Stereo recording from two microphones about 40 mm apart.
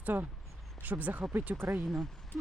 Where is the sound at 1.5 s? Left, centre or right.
Right.